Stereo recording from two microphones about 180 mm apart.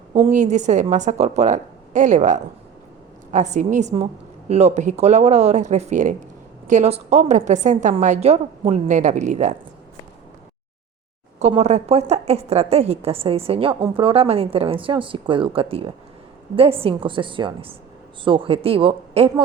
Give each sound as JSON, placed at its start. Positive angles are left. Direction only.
{"t": 0.1, "sound": "a woman's voice", "side_deg": -40}
{"t": 11.3, "sound": "a woman's voice", "side_deg": -35}